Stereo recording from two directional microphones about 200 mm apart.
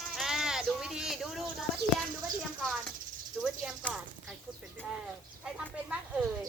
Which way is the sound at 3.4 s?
Centre (ahead or behind).